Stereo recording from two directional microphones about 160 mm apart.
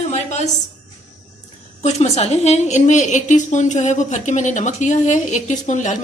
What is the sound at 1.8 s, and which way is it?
A woman's voice, 45° left (ahead or behind).